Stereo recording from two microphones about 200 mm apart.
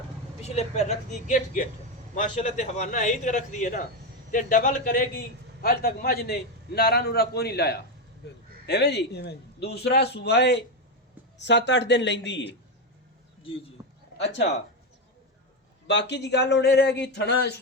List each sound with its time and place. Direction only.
0.4 s a man's voice: 35° left (ahead or behind); by 12.5 s 60° left (ahead or behind)
13.5 s a man's voice: 25° left (ahead or behind)
15.9 s a man's voice: 60° left (ahead or behind)